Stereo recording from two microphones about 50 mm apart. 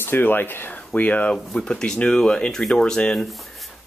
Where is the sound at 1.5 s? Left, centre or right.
Centre.